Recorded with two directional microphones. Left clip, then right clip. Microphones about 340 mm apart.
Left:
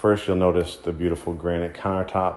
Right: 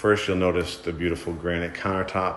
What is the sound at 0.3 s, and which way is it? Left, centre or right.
Speech, centre.